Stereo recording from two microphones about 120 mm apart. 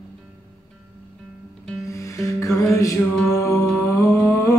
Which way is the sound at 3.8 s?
25° left (ahead or behind).